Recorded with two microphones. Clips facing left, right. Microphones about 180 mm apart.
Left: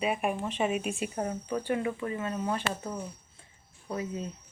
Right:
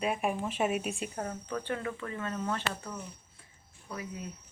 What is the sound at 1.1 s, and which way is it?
Speech, 15° left (ahead or behind).